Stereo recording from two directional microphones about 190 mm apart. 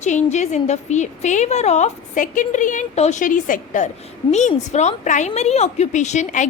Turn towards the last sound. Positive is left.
turn(degrees=40)  # may be behind; listen again after turning